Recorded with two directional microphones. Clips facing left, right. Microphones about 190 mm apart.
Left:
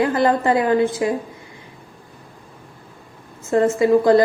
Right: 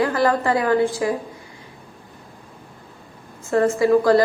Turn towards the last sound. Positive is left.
turn(degrees=20)  # may be behind; listen again after turning